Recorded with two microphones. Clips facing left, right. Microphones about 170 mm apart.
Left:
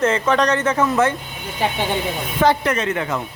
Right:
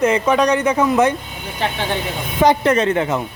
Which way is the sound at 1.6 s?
10° left (ahead or behind).